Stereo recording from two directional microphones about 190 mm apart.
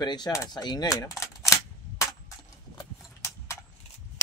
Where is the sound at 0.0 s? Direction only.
20° left (ahead or behind).